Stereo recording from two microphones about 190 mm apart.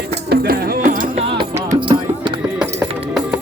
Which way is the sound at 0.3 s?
55° right (ahead or behind).